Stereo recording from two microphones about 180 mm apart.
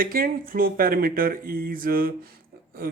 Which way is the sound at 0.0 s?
55° right (ahead or behind).